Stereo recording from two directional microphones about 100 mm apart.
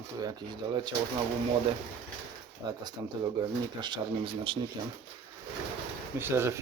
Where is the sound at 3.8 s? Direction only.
55° right (ahead or behind).